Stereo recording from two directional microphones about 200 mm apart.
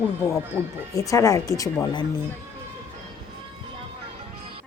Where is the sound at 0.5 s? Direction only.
10° right (ahead or behind).